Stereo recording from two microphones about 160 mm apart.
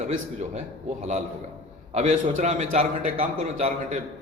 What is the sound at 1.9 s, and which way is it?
A man's voice, 45° right (ahead or behind).